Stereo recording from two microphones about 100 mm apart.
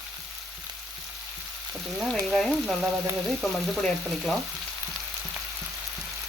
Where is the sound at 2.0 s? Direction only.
5° left (ahead or behind).